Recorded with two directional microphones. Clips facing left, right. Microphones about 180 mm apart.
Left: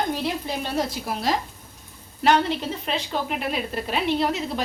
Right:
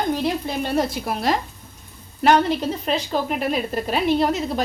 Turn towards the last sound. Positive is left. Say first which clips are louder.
# right 4 dB
turn(degrees=-45)  # may be behind; listen again after turning